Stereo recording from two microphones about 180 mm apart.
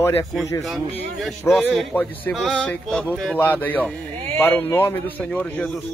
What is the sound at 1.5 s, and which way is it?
A man's voice, centre (ahead or behind).